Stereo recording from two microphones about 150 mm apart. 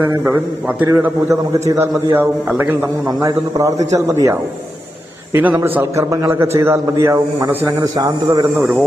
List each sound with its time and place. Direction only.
0.8 s a man's voice: 15° right (ahead or behind)
3.1 s a man's voice: 20° right (ahead or behind)